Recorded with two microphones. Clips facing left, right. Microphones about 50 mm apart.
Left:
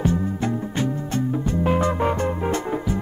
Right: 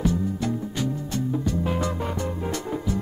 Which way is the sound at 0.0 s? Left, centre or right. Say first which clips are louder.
Left 2 dB; left.